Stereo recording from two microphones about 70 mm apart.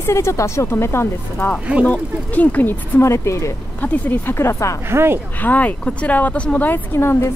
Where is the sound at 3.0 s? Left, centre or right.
Left.